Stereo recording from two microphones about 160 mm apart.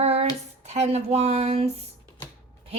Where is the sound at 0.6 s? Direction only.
45° right (ahead or behind).